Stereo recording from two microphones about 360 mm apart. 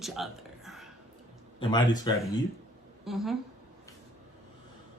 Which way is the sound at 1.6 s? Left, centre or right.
Centre.